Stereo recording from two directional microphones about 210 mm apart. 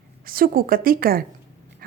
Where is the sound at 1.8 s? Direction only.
45° right (ahead or behind).